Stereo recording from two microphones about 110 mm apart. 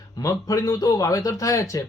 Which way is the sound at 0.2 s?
35° left (ahead or behind).